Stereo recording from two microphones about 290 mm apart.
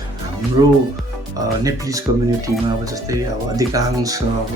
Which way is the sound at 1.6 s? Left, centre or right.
Centre.